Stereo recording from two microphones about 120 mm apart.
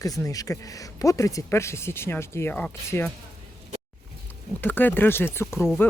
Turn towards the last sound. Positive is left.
turn(degrees=20)  # may be behind; listen again after turning